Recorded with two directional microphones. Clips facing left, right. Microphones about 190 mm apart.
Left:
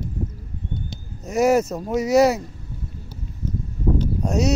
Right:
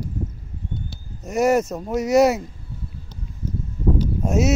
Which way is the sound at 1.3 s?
Centre (ahead or behind).